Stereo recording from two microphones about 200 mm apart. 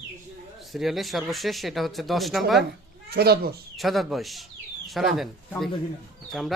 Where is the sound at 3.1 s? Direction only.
50° right (ahead or behind).